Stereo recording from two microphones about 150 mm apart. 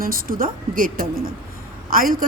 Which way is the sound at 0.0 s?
75° right (ahead or behind).